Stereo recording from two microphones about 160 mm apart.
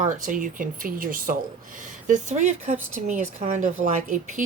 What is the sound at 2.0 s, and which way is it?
Speech, 50° right (ahead or behind).